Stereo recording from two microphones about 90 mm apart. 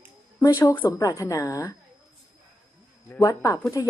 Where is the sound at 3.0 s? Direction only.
30° left (ahead or behind).